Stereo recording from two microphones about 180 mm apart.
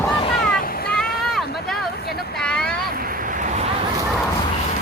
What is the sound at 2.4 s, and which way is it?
Vehicle, 5° left (ahead or behind).